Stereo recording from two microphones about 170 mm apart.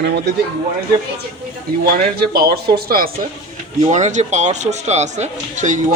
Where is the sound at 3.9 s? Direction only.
45° right (ahead or behind).